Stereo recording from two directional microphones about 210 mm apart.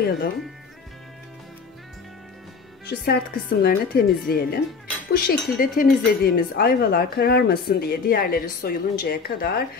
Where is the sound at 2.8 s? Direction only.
50° left (ahead or behind).